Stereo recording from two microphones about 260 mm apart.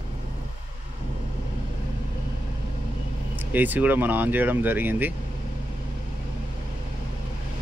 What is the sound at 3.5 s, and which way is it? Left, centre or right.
Speech, centre.